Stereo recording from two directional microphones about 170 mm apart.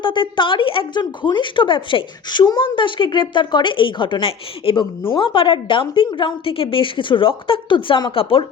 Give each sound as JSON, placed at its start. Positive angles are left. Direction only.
{"t": 0.0, "sound": "a woman's voice", "side_deg": 30}